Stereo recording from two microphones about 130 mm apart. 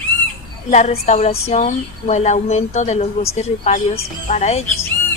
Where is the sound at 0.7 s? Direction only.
60° left (ahead or behind).